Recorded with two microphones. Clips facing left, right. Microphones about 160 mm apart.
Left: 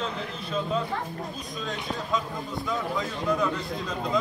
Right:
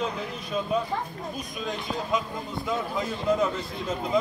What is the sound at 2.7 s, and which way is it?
Speech, 20° right (ahead or behind).